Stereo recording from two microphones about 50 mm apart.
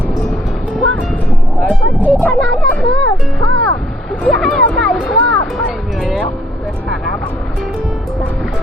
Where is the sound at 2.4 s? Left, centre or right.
Centre.